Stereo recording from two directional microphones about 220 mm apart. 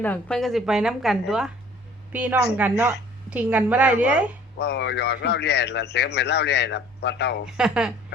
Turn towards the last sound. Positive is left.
turn(degrees=-5)  # may be behind; listen again after turning